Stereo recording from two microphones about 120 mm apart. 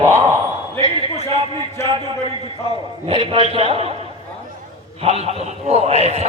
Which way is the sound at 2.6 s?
50° right (ahead or behind).